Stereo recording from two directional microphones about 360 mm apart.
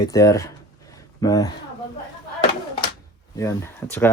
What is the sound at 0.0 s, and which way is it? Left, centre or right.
Speech, centre.